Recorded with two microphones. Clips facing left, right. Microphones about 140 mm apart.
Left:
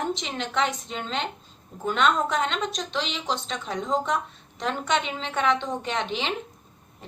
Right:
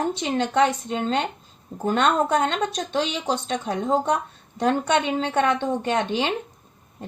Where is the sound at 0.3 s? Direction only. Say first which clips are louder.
Right 7 dB; 45° right (ahead or behind).